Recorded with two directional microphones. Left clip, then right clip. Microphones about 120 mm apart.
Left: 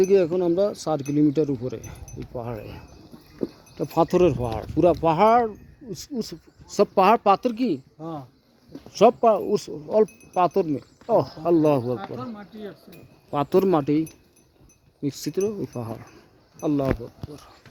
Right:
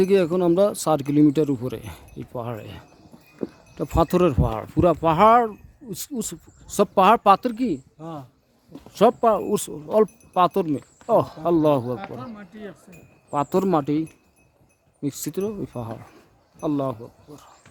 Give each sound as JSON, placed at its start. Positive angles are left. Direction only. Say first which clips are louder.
{"t": 0.0, "sound": "speech", "louder": "even", "side_deg": -55}
{"t": 3.8, "sound": "speech", "louder": "even", "side_deg": -30}
{"t": 6.7, "sound": "speech", "louder": "right 1 dB", "side_deg": -30}
{"t": 7.4, "sound": "speech", "louder": "left 1 dB", "side_deg": -25}
{"t": 7.9, "sound": "speech", "louder": "left 1 dB", "side_deg": 5}
{"t": 8.9, "sound": "speech", "louder": "left 1 dB", "side_deg": -30}
{"t": 9.4, "sound": "speech", "louder": "even", "side_deg": -40}
{"t": 11.5, "sound": "speech", "louder": "even", "side_deg": -20}
{"t": 13.3, "sound": "speech", "louder": "left 1 dB", "side_deg": -10}
{"t": 15.0, "sound": "speech", "louder": "left 2 dB", "side_deg": -20}